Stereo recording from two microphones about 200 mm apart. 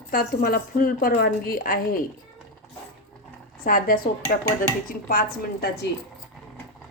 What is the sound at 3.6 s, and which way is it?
A woman's voice, 45° left (ahead or behind).